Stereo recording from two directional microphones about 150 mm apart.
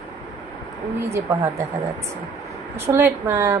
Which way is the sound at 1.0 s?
20° right (ahead or behind).